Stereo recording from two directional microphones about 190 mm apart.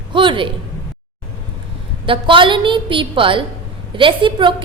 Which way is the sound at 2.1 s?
25° right (ahead or behind).